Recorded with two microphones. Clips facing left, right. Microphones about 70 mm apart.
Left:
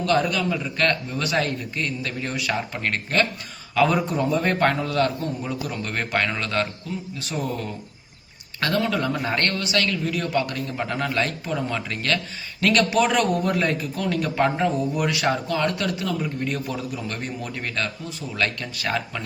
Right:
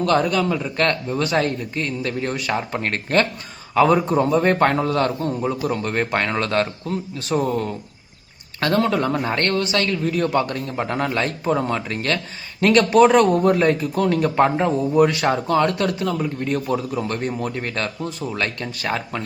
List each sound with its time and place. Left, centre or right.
0.0 s a man's voice: right
18.3 s a man's voice: right